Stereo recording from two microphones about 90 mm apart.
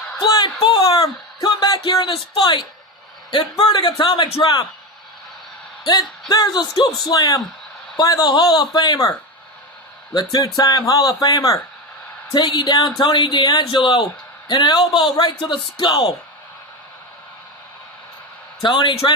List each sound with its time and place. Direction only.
0.2 s a man's voice: 55° left (ahead or behind)
0.6 s speech: 75° left (ahead or behind)
1.0 s a sound: 40° left (ahead or behind)
1.8 s a man's voice: 60° left (ahead or behind)
5.8 s a man's voice: 50° left (ahead or behind)
10.2 s a man's voice: 50° left (ahead or behind)
12.3 s a man's voice: 55° left (ahead or behind)
18.6 s a man's voice: 65° left (ahead or behind)